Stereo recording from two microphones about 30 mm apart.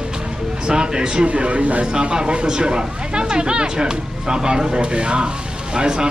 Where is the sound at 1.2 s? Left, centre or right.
Right.